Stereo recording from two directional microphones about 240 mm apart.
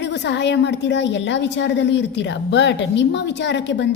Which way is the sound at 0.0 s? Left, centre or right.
Left.